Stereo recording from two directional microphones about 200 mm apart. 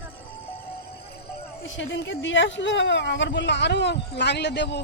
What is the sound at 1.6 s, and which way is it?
Speech, 65° left (ahead or behind).